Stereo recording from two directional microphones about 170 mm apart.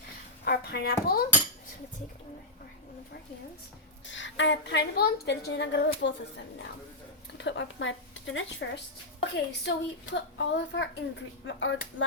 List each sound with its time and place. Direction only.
0.4 s speech: 70° left (ahead or behind)
4.0 s a woman's voice: 90° left
7.3 s a woman's voice: 90° left